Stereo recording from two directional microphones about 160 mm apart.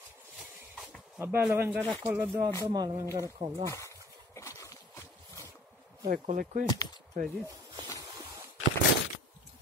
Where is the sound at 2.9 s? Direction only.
20° right (ahead or behind).